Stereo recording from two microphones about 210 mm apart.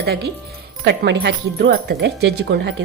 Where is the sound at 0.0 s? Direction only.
50° right (ahead or behind).